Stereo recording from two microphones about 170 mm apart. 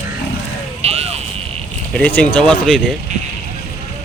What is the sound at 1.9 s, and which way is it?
Speech, 5° left (ahead or behind).